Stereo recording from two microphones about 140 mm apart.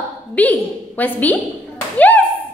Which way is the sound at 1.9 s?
10° left (ahead or behind).